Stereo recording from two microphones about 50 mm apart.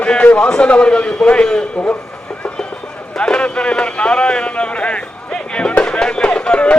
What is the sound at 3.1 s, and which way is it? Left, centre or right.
Speech, centre.